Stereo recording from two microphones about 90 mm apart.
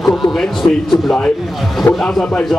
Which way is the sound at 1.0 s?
5° left (ahead or behind).